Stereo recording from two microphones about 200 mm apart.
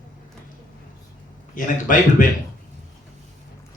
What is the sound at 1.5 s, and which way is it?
Speech, 40° left (ahead or behind).